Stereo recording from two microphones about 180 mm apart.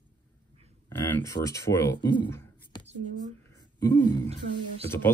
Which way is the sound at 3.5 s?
20° left (ahead or behind).